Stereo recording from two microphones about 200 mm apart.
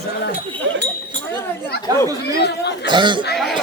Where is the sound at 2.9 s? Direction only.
25° right (ahead or behind).